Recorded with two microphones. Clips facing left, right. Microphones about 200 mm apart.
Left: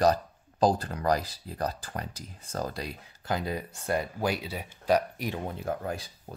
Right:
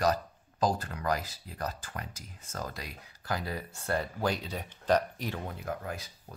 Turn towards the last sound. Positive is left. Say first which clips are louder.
# left 5 dB
turn(degrees=30)  # may be behind; listen again after turning